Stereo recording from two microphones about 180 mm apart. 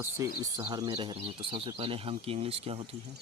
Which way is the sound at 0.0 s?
20° right (ahead or behind).